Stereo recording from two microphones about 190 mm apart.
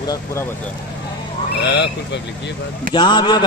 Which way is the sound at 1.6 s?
65° left (ahead or behind).